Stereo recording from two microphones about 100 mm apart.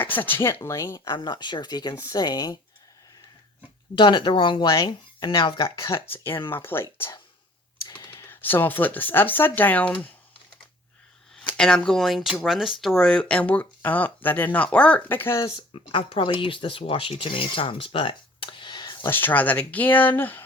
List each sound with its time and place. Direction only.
0.0 s speech: 20° left (ahead or behind)
1.0 s speech: 45° left (ahead or behind)
3.9 s speech: 55° left (ahead or behind)
5.6 s speech: 30° left (ahead or behind)
7.9 s clicking: 50° left (ahead or behind)
8.2 s speech: 20° left (ahead or behind)
11.5 s speech: 10° left (ahead or behind)
13.0 s speech: 5° left (ahead or behind); by 15.5 s 30° left (ahead or behind)
15.5 s speech: 60° left (ahead or behind)
19.0 s speech: 20° left (ahead or behind)